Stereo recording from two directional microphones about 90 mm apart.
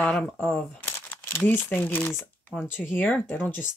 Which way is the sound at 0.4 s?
25° left (ahead or behind).